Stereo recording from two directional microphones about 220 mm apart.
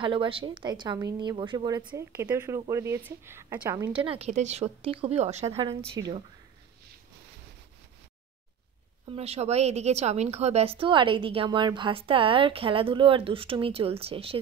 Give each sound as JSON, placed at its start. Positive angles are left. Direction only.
{"t": 0.0, "sound": "a woman's voice", "side_deg": -20}
{"t": 3.9, "sound": "a woman's voice", "side_deg": -25}
{"t": 9.1, "sound": "a woman's voice", "side_deg": -25}